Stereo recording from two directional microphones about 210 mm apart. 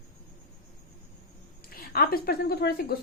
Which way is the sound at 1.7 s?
45° left (ahead or behind).